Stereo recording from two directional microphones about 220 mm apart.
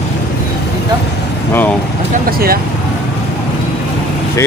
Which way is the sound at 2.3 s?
45° right (ahead or behind).